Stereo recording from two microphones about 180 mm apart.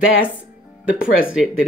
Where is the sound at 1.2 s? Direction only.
5° right (ahead or behind).